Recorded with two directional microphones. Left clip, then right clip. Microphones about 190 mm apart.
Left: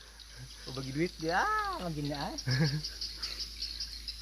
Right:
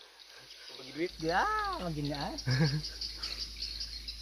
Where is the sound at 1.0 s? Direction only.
25° left (ahead or behind).